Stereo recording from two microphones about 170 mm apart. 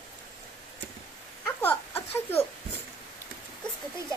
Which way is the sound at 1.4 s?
10° left (ahead or behind).